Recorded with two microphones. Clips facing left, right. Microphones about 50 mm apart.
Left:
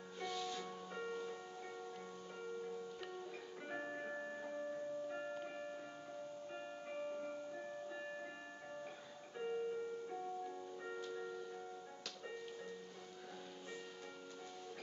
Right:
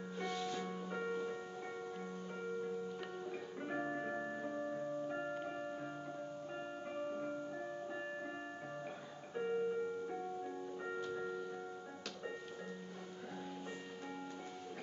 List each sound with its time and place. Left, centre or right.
0.2 s music: centre
3.3 s music: centre
9.3 s music: centre